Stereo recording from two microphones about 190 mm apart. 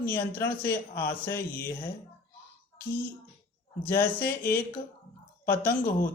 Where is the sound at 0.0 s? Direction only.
10° left (ahead or behind).